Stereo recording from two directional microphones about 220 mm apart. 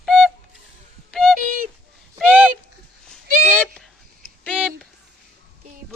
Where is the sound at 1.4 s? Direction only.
40° right (ahead or behind).